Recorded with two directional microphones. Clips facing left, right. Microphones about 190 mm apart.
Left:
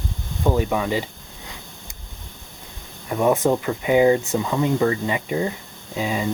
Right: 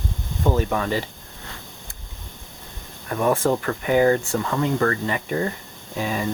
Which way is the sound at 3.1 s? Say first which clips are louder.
Left 2 dB; 15° left (ahead or behind).